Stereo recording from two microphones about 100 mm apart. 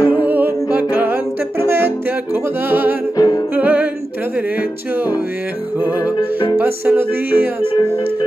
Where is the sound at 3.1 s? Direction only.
40° left (ahead or behind).